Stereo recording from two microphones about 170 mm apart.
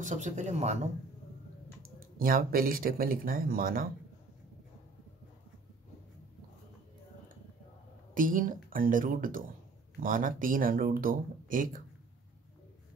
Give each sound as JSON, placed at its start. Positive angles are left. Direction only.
{"t": 0.0, "sound": "speech", "side_deg": -45}
{"t": 2.0, "sound": "speech", "side_deg": -55}
{"t": 8.1, "sound": "speech", "side_deg": -50}